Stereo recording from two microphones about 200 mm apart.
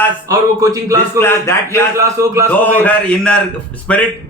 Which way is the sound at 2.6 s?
5° left (ahead or behind).